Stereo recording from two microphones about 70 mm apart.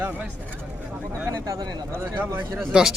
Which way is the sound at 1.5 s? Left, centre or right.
Right.